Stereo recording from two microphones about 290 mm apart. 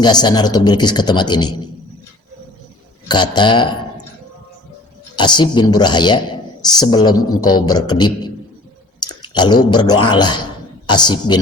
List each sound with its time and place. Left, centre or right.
0.0 s speech: centre
3.1 s speech: centre
5.1 s speech: centre